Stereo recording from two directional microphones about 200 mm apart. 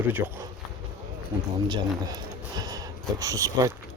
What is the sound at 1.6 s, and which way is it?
Speech, 20° right (ahead or behind).